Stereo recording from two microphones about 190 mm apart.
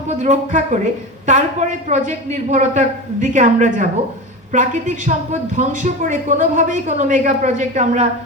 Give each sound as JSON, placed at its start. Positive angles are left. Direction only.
{"t": 0.1, "sound": "a woman's voice", "side_deg": -40}